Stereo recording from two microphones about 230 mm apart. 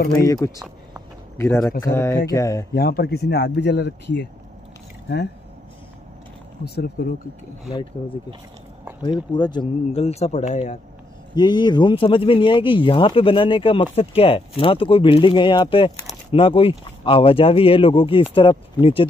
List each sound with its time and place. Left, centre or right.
0.2 s a man's voice: centre
2.7 s speech: left
6.6 s speech: left
9.0 s speech: centre
11.3 s speech: centre